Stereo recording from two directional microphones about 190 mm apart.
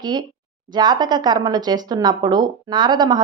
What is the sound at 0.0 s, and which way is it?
Speech, 20° right (ahead or behind).